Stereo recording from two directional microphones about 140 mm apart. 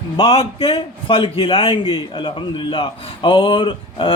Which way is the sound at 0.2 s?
40° left (ahead or behind).